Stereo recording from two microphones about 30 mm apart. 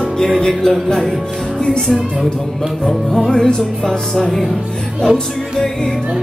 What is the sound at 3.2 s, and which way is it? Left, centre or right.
Music, left.